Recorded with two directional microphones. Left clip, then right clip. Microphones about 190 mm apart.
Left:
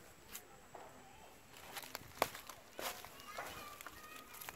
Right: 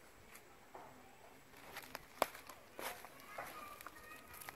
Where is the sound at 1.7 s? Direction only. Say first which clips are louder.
Left 2 dB; 10° left (ahead or behind).